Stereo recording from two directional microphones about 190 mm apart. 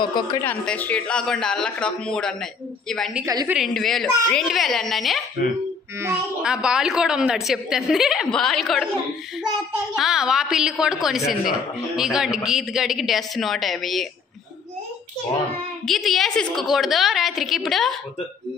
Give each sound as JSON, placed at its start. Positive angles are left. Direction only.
{"t": 0.0, "sound": "a woman's voice", "side_deg": 25}
{"t": 0.4, "sound": "a woman's voice", "side_deg": 10}
{"t": 3.3, "sound": "a woman's voice", "side_deg": -15}
{"t": 3.5, "sound": "a woman's voice", "side_deg": 0}
{"t": 9.9, "sound": "a woman's voice", "side_deg": 0}
{"t": 15.9, "sound": "a woman's voice", "side_deg": 0}